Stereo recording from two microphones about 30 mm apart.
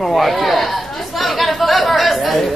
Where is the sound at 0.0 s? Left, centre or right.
Centre.